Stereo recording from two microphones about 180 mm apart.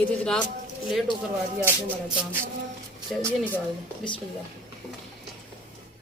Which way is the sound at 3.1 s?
Centre (ahead or behind).